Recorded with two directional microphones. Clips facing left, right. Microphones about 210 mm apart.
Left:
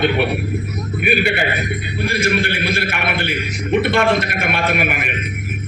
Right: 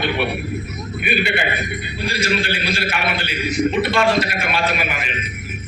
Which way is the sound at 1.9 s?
50° left (ahead or behind).